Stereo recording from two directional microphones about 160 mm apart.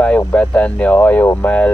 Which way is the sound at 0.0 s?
10° left (ahead or behind).